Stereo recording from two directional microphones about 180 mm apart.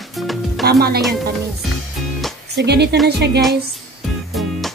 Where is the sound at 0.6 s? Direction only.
60° right (ahead or behind).